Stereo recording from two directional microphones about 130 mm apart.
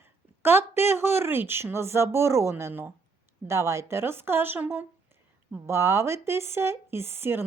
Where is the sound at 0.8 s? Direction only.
20° right (ahead or behind).